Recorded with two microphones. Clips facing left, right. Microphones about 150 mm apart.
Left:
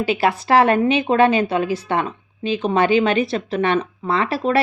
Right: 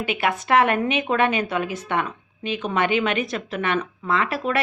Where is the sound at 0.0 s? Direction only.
35° left (ahead or behind).